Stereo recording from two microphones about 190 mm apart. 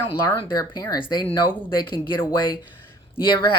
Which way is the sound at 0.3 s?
20° left (ahead or behind).